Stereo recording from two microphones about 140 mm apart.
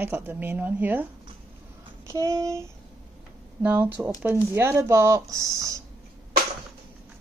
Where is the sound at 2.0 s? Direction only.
20° right (ahead or behind).